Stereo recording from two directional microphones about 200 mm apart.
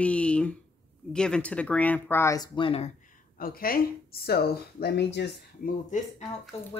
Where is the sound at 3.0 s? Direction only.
45° left (ahead or behind).